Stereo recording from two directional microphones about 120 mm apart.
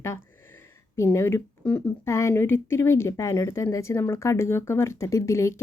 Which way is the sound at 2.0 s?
25° left (ahead or behind).